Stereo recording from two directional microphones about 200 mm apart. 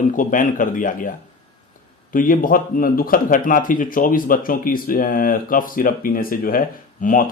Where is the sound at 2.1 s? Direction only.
45° left (ahead or behind).